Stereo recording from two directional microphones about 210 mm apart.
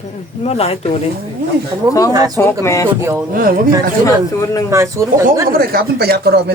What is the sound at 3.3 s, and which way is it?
Speech, 45° right (ahead or behind).